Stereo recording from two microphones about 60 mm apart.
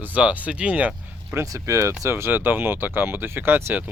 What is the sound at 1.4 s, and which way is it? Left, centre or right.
Speech, right.